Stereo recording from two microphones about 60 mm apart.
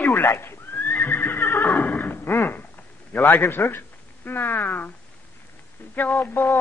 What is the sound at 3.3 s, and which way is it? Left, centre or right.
Speech, left.